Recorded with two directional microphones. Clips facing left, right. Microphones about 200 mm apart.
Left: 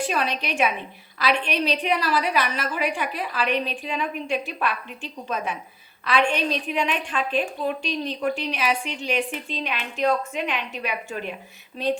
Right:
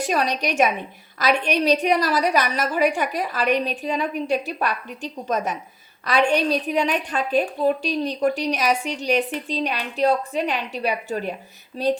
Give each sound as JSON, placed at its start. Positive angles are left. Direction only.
{"t": 0.0, "sound": "a woman's voice", "side_deg": -40}